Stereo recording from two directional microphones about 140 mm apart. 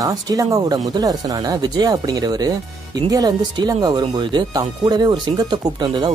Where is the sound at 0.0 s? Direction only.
25° right (ahead or behind).